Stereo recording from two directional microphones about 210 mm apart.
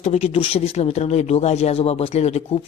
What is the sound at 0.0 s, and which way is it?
Speech, 30° left (ahead or behind).